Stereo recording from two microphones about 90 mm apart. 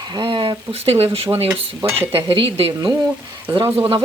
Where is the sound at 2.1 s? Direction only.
80° right.